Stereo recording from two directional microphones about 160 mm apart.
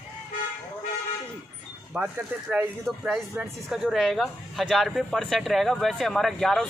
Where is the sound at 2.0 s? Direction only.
15° right (ahead or behind).